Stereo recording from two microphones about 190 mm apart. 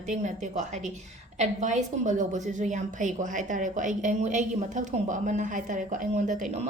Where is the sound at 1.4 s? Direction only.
40° right (ahead or behind).